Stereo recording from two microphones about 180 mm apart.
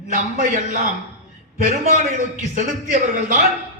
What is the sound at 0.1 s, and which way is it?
A man's voice, 45° right (ahead or behind).